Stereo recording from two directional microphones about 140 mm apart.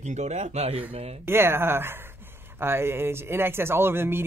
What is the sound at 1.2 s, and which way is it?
Speech, 15° right (ahead or behind).